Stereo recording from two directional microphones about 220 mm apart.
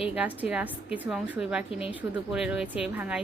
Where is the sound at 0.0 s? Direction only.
5° right (ahead or behind).